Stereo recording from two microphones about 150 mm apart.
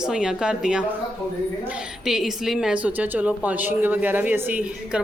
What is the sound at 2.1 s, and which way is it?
A woman's voice, centre (ahead or behind).